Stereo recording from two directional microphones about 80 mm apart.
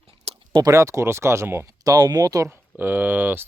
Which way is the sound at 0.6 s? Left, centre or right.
Right.